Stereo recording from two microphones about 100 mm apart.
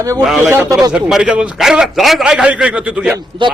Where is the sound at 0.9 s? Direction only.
5° right (ahead or behind).